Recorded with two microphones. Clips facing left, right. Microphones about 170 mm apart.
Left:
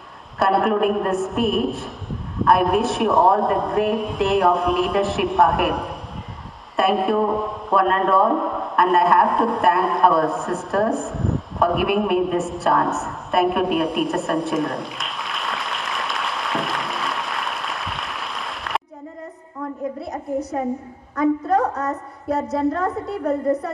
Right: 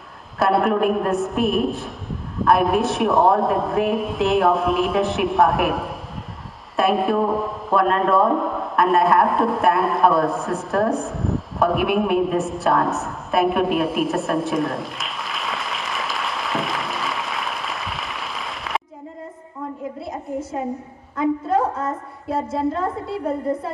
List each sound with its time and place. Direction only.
0.4 s a man's voice: centre (ahead or behind)
21.2 s a woman's voice: 25° right (ahead or behind)